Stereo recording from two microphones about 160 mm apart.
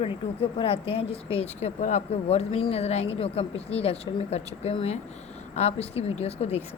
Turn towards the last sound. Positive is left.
turn(degrees=40)  # may be behind; listen again after turning